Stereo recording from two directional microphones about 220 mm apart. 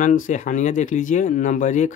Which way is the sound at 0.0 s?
35° left (ahead or behind).